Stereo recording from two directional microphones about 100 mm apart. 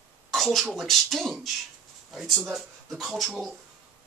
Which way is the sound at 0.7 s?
Centre (ahead or behind).